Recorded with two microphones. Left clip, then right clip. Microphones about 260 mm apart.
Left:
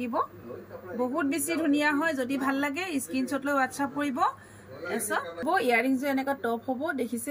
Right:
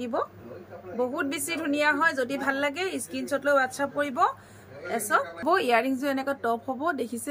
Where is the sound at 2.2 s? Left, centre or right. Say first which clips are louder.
Right 2 dB; right.